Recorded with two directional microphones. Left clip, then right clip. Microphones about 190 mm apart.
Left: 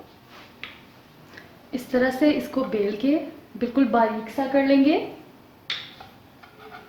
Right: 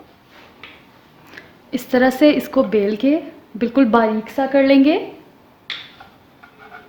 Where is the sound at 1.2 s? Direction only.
55° right (ahead or behind).